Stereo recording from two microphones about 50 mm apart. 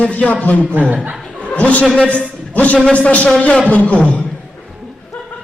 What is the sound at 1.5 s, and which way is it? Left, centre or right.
Speech, left.